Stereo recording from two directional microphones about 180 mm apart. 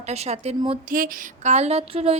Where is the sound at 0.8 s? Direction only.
50° right (ahead or behind); by 2.1 s 35° right (ahead or behind).